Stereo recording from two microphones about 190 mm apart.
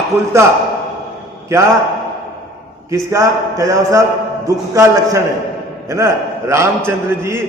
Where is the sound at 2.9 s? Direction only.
15° right (ahead or behind).